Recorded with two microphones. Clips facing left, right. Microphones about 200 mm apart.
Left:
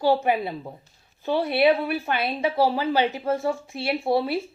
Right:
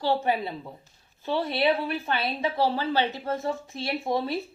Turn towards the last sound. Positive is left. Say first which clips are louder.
# left 4 dB
turn(degrees=10)  # may be behind; listen again after turning